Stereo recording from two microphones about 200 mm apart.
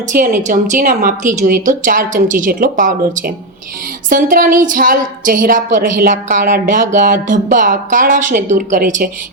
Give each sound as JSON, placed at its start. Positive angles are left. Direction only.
{"t": 0.1, "sound": "a woman's voice", "side_deg": -40}